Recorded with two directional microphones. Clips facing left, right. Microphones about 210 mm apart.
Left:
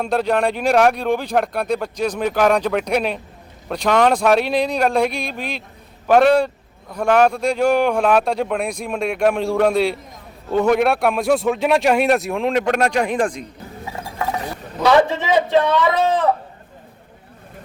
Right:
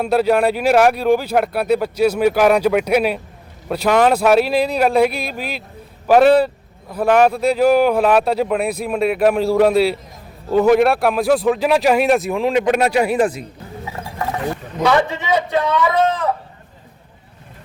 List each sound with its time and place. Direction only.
0.0 s speech: 5° right (ahead or behind)
15.0 s speech: 30° left (ahead or behind)